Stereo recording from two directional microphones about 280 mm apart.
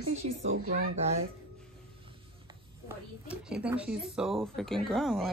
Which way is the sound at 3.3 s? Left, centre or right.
Centre.